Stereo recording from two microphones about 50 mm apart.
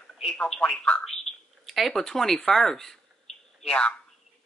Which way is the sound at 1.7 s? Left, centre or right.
Centre.